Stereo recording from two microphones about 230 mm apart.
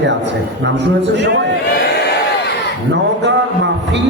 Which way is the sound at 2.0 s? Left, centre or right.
Left.